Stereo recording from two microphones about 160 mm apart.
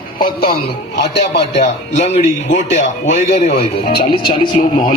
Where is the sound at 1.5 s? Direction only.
45° left (ahead or behind).